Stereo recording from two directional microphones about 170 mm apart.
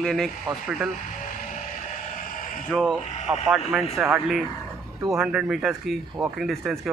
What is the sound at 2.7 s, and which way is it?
Speech, 5° left (ahead or behind).